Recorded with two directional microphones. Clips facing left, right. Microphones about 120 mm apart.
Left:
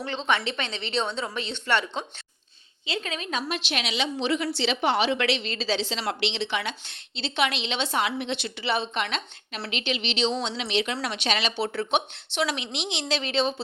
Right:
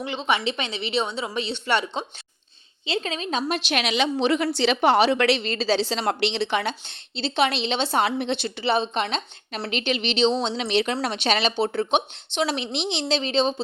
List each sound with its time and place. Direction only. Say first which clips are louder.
0.0 s a woman's voice: right 2 dB; 10° right (ahead or behind)
2.8 s speech: right 4 dB; 25° right (ahead or behind)
3.5 s a woman's voice: right 5 dB; 55° right (ahead or behind); by 9.6 s 30° right (ahead or behind)
9.6 s a woman's voice: right 4 dB; 45° right (ahead or behind); by 13.6 s 25° right (ahead or behind)